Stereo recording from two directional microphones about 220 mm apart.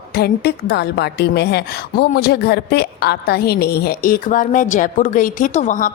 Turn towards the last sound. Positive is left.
turn(degrees=35)  # may be behind; listen again after turning